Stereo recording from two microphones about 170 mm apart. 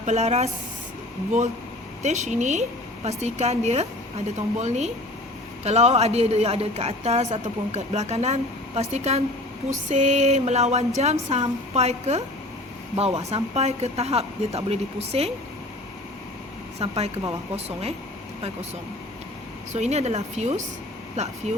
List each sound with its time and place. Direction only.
0.0 s a woman's voice: 40° right (ahead or behind)
2.0 s a woman's voice: 45° right (ahead or behind)
16.7 s a woman's voice: 40° right (ahead or behind)
19.7 s a woman's voice: 40° right (ahead or behind)